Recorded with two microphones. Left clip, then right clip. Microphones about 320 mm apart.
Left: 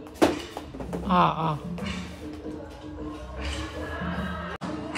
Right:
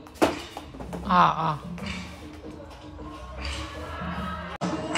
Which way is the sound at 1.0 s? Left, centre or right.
Right.